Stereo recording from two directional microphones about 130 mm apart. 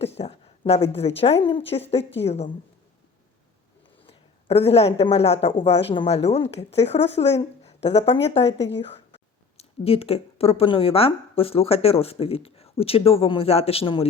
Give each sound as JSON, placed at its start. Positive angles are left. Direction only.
{"t": 0.0, "sound": "a woman's voice", "side_deg": 55}
{"t": 4.0, "sound": "a woman's voice", "side_deg": 50}